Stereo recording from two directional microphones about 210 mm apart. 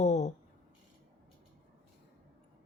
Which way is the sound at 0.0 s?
35° left (ahead or behind).